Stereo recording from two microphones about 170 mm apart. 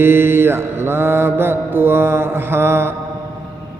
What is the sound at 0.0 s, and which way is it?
Mantra, 15° right (ahead or behind).